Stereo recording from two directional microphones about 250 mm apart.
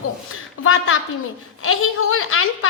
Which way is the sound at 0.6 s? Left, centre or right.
Left.